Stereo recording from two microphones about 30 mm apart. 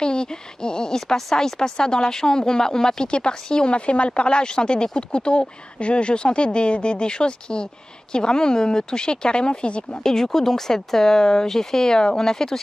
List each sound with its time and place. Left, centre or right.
0.0 s a sound: left
0.9 s a woman's voice: centre
3.7 s a woman's voice: left
10.0 s speech: centre